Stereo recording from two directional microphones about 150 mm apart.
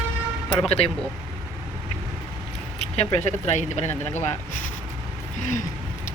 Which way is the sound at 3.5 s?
50° left (ahead or behind).